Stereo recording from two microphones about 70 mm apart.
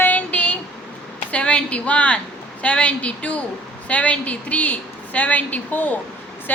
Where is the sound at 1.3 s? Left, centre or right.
Centre.